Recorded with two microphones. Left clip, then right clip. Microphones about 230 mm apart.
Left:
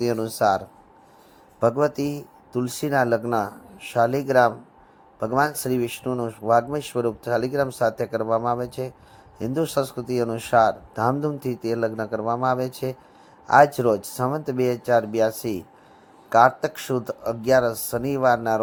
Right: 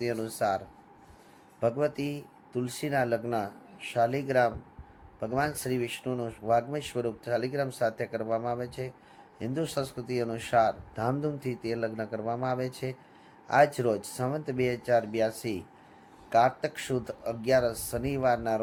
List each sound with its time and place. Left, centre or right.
0.0 s speech: left
1.6 s speech: left